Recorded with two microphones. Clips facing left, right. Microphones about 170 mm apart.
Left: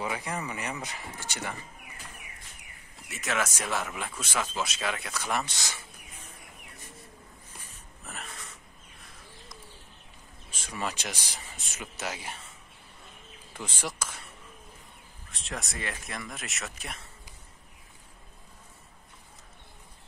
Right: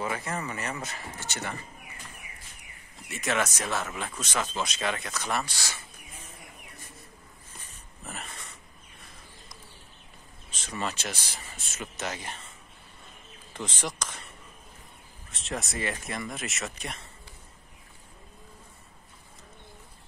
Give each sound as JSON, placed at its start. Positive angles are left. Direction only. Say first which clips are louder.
{"t": 0.0, "sound": "speech", "louder": "right 1 dB", "side_deg": 10}
{"t": 3.1, "sound": "speech", "louder": "right 2 dB", "side_deg": 0}
{"t": 5.4, "sound": "speech", "louder": "even", "side_deg": 20}
{"t": 8.0, "sound": "a sound", "louder": "right 2 dB", "side_deg": 0}
{"t": 10.5, "sound": "speech", "louder": "right 1 dB", "side_deg": 10}
{"t": 13.5, "sound": "speech", "louder": "right 2 dB", "side_deg": 10}
{"t": 15.3, "sound": "speech", "louder": "right 4 dB", "side_deg": 0}